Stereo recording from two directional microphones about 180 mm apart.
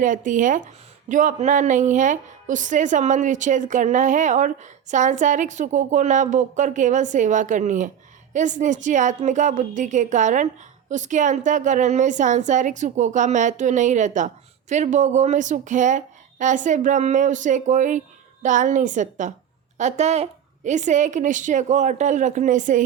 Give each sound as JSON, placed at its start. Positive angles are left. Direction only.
{"t": 0.0, "sound": "speech", "side_deg": -45}